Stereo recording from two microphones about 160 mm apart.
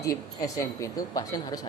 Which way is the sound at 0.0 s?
20° left (ahead or behind).